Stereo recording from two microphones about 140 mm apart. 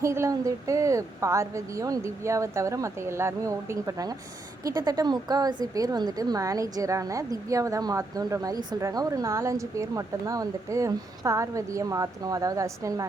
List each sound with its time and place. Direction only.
0.0 s a woman's voice: 20° right (ahead or behind)